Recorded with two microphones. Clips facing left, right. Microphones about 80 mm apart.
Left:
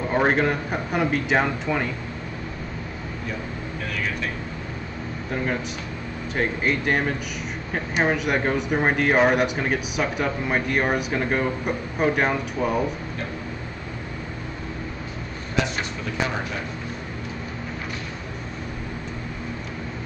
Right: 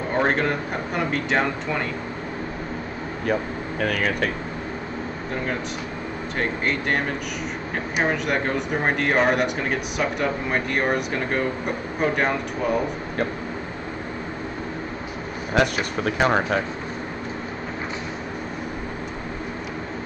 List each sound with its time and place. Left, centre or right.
0.1 s speech: centre
3.8 s speech: right
6.3 s speech: centre
15.5 s speech: right